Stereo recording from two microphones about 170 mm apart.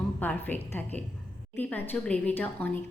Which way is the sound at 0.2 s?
10° left (ahead or behind).